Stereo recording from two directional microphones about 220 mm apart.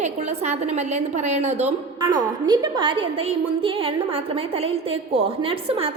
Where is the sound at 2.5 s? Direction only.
20° right (ahead or behind).